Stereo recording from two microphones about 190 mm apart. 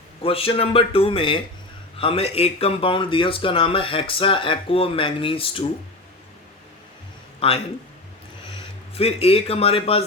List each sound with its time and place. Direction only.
0.2 s speech: 30° left (ahead or behind)
7.3 s speech: 30° left (ahead or behind)
9.0 s speech: 30° left (ahead or behind)